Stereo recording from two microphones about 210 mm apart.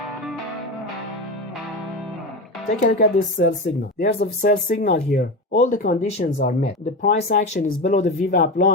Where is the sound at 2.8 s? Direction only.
40° left (ahead or behind).